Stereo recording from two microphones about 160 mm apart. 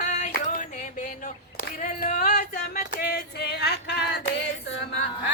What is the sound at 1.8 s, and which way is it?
Female singing, 55° left (ahead or behind).